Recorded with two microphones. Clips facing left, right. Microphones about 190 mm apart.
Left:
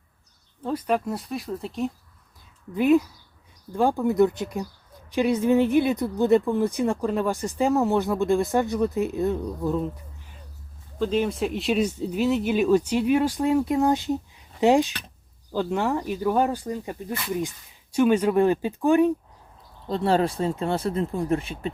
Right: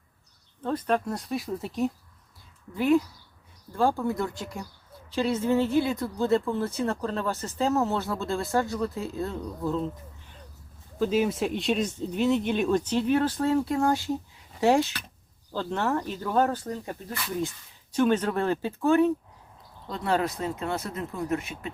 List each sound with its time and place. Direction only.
0.6 s speech: 10° left (ahead or behind)
2.7 s speech: 20° left (ahead or behind)
11.0 s speech: 5° right (ahead or behind); by 19.1 s 15° left (ahead or behind)
19.9 s speech: 30° left (ahead or behind)